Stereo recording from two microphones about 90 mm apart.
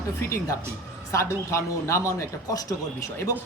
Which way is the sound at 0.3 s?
35° left (ahead or behind).